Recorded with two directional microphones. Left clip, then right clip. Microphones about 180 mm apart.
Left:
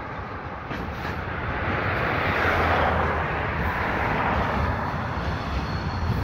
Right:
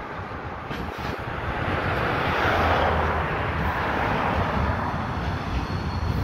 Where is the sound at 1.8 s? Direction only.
40° right (ahead or behind); by 4.3 s 55° right (ahead or behind).